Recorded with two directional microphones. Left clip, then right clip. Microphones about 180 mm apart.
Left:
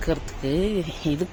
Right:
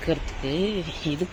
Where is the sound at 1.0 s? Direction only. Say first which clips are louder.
Left 3 dB; 25° left (ahead or behind).